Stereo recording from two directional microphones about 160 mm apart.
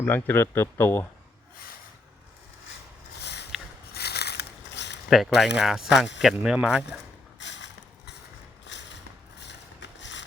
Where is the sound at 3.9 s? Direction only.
90° left.